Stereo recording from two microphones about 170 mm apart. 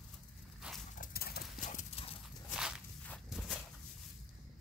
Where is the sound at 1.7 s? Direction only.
40° left (ahead or behind).